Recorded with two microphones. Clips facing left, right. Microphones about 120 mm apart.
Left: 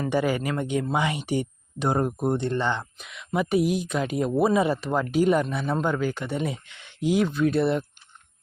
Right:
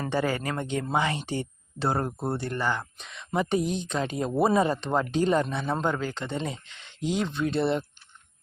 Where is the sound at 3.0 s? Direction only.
5° left (ahead or behind).